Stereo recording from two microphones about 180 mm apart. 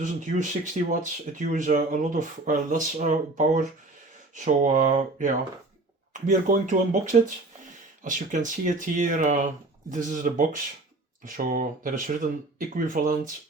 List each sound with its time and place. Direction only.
0.0 s speech: 45° right (ahead or behind)